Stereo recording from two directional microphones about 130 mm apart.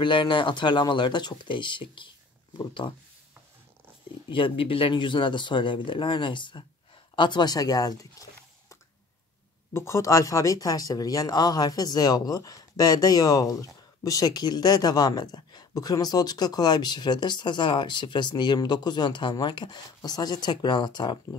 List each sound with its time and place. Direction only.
0.0 s speech: 40° left (ahead or behind)
4.3 s speech: 40° left (ahead or behind); by 8.7 s 25° left (ahead or behind)
9.8 s speech: 20° left (ahead or behind)